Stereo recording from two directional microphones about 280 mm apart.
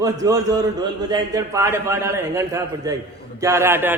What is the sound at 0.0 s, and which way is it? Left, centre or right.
A man's voice, centre.